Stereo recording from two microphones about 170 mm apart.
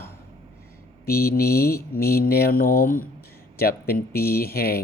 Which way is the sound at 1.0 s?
65° left (ahead or behind).